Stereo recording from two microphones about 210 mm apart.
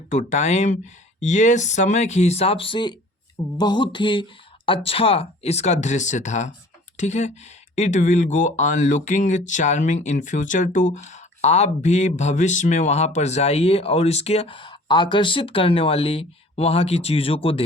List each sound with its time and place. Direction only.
0.1 s speech: 35° left (ahead or behind)